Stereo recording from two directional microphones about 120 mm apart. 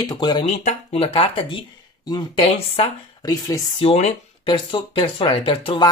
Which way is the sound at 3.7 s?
60° left (ahead or behind).